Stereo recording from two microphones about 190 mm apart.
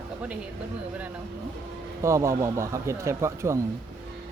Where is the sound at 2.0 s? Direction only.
15° right (ahead or behind).